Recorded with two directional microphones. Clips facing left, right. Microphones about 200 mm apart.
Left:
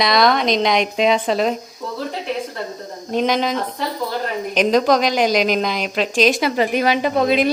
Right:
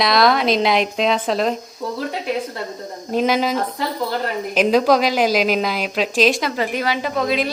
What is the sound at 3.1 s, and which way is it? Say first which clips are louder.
A woman's voice: even; 5° right (ahead or behind).